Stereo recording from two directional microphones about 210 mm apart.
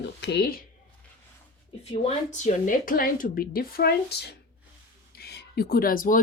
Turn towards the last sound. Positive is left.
turn(degrees=40)  # may be behind; listen again after turning